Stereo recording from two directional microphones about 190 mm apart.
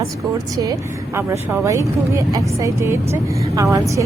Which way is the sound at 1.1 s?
15° right (ahead or behind).